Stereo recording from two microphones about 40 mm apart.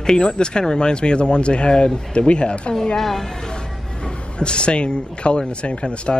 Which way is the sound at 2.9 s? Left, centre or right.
Centre.